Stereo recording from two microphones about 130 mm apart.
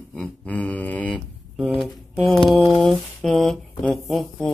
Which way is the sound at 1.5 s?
Centre (ahead or behind).